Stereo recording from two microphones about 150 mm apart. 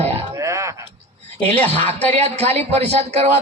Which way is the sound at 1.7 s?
45° right (ahead or behind).